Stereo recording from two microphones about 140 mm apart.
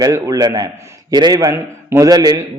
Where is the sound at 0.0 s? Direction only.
25° right (ahead or behind).